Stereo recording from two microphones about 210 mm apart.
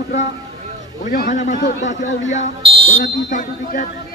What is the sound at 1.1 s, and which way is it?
A man's voice, 40° left (ahead or behind).